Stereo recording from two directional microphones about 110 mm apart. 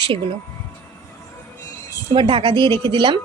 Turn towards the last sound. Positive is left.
turn(degrees=-45)  # may be behind; listen again after turning